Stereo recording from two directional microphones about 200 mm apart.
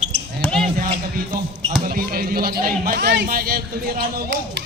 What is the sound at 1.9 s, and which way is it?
A man's voice, 45° right (ahead or behind).